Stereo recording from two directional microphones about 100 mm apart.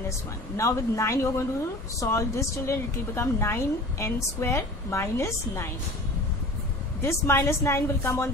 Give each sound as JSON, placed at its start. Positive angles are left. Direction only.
{"t": 0.6, "sound": "a woman's voice", "side_deg": 30}
{"t": 7.0, "sound": "a woman's voice", "side_deg": 25}